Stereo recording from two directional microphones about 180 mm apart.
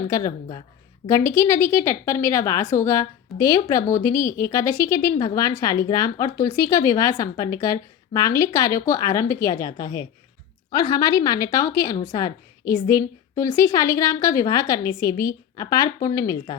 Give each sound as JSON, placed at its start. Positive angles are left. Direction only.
{"t": 0.1, "sound": "a woman's voice", "side_deg": 20}